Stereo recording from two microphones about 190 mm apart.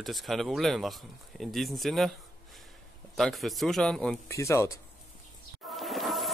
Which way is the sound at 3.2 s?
Centre (ahead or behind).